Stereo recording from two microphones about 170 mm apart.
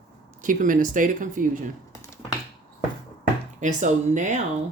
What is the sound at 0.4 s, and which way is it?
Speech, 50° right (ahead or behind).